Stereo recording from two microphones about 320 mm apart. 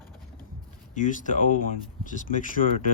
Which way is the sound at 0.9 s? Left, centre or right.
Left.